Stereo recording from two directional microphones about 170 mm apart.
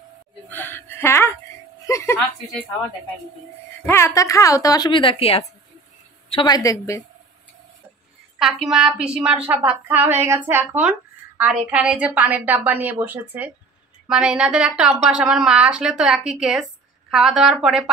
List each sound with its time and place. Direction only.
0.5 s a sound: 10° left (ahead or behind)
3.8 s speech: 15° left (ahead or behind); by 5.5 s 35° left (ahead or behind)
6.3 s speech: 25° left (ahead or behind)
8.4 s a woman's voice: centre (ahead or behind)